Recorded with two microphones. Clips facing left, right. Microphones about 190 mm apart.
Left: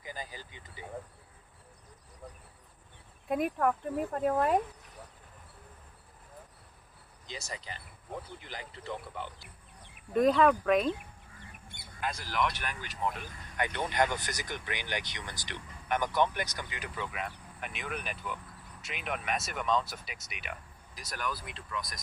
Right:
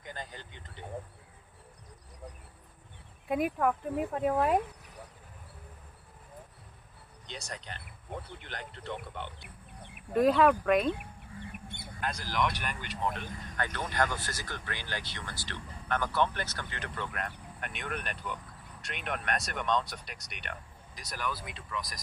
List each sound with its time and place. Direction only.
0.0 s vehicle: 5° left (ahead or behind)
3.2 s speech: centre (ahead or behind)
7.3 s speech: 5° left (ahead or behind)
9.4 s bird: 60° right (ahead or behind)
10.1 s speech: 5° right (ahead or behind)
11.9 s speech: 5° left (ahead or behind)
13.6 s speech: 20° left (ahead or behind); by 22.0 s centre (ahead or behind)